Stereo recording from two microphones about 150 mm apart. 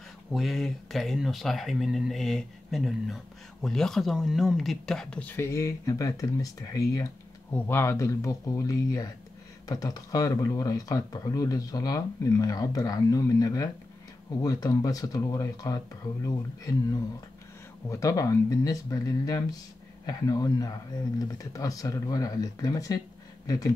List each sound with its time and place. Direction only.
0.3 s speech: centre (ahead or behind); by 15.8 s 25° left (ahead or behind)
17.8 s speech: 20° left (ahead or behind)